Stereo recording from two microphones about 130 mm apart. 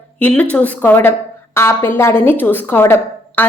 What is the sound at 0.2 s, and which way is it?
A woman's voice, 10° left (ahead or behind).